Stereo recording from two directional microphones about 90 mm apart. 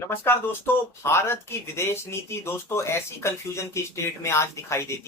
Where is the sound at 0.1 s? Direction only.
25° left (ahead or behind).